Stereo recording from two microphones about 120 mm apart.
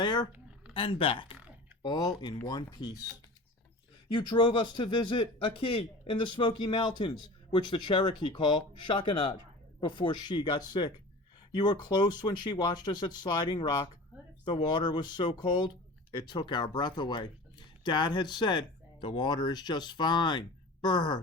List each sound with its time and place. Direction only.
0.0 s a sound: 35° left (ahead or behind)
0.7 s speech: 50° left (ahead or behind)
1.8 s speech: 35° left (ahead or behind)
4.1 s speech: 40° left (ahead or behind)